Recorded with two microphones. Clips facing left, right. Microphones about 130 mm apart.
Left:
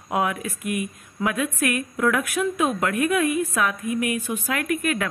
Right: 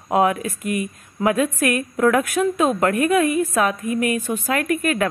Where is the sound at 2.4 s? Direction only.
45° right (ahead or behind).